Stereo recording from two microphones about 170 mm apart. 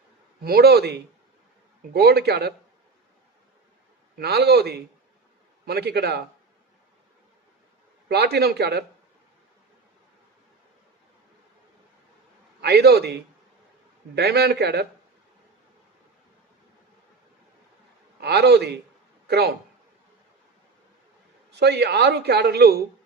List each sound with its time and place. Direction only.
0.4 s a man's voice: 65° right (ahead or behind)
4.2 s a man's voice: 70° right (ahead or behind)
8.0 s a man's voice: 70° right (ahead or behind)
12.6 s a man's voice: 75° right (ahead or behind)
18.2 s a man's voice: 75° right (ahead or behind)
21.5 s a man's voice: 75° right (ahead or behind)